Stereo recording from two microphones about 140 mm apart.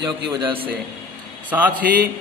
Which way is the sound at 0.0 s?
40° right (ahead or behind).